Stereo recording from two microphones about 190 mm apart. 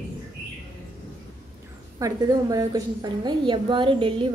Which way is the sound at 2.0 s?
20° right (ahead or behind).